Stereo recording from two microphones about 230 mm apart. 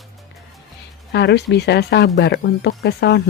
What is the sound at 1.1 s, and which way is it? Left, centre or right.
Speech, left.